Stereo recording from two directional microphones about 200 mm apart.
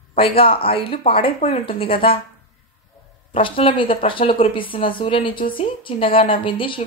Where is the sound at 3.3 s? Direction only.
25° left (ahead or behind).